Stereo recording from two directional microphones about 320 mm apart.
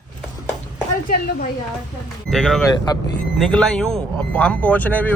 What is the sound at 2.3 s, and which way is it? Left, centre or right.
Speech, centre.